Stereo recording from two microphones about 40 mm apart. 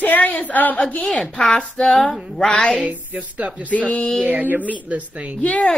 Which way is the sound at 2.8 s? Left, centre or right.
Right.